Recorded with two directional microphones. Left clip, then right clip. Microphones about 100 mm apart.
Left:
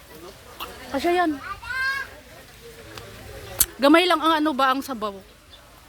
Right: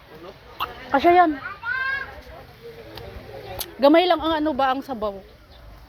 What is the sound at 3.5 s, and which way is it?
Speech, 40° left (ahead or behind).